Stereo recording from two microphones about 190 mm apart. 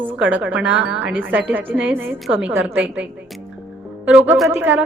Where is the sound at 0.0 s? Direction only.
10° right (ahead or behind).